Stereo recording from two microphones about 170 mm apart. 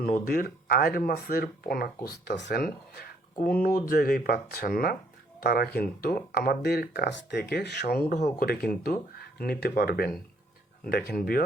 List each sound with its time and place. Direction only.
0.0 s speech: 55° left (ahead or behind)
2.0 s speech: 80° left
8.1 s speech: 55° left (ahead or behind)